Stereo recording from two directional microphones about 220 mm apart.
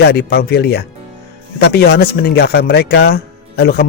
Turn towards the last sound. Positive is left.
turn(degrees=45)  # may be behind; listen again after turning